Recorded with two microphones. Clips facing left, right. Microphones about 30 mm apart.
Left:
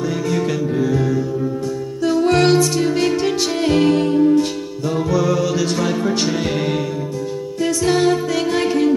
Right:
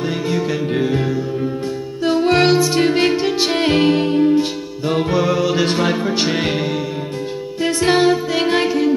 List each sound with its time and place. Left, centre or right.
0.3 s music: centre
0.7 s music: right; by 2.7 s centre
2.7 s music: right
6.0 s music: right
7.6 s music: right
8.6 s music: centre